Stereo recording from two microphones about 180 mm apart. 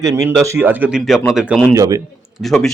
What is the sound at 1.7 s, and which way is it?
Speech, 20° right (ahead or behind).